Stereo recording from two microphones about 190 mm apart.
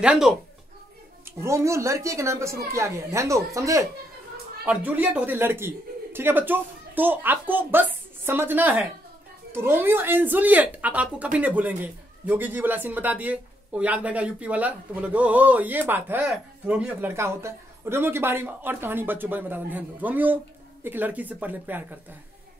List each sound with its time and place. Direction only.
0.0 s speech: 5° right (ahead or behind)
1.4 s speech: 15° right (ahead or behind)